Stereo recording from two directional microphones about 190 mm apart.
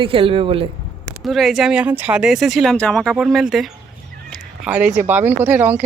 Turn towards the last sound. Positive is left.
turn(degrees=-10)  # may be behind; listen again after turning